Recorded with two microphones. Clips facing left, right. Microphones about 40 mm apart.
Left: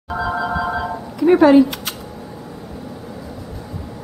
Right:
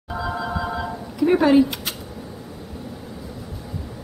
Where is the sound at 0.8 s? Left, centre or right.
Centre.